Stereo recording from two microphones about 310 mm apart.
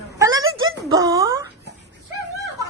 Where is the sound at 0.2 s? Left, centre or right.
Centre.